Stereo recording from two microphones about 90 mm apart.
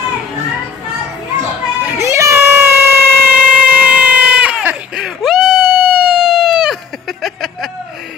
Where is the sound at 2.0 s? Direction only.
35° right (ahead or behind).